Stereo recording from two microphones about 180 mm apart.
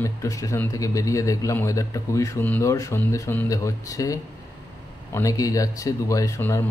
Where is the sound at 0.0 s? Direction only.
15° left (ahead or behind).